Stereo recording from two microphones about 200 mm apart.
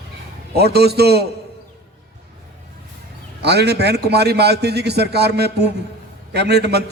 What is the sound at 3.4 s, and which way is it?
A man's voice, 55° right (ahead or behind).